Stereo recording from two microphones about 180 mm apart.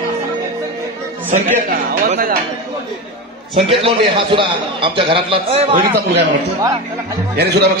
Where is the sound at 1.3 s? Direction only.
45° right (ahead or behind).